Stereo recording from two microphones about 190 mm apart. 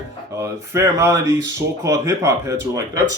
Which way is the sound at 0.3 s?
15° right (ahead or behind).